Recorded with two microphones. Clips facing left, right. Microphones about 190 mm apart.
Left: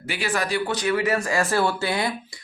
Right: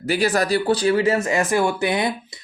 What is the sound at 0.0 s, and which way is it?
Speech, 40° right (ahead or behind).